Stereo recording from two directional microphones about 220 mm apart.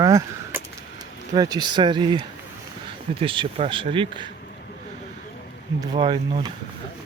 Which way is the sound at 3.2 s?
25° right (ahead or behind).